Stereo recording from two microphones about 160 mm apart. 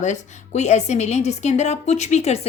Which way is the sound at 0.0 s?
45° left (ahead or behind).